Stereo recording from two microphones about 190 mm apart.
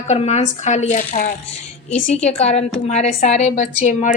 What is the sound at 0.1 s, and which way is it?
A woman's voice, 35° left (ahead or behind).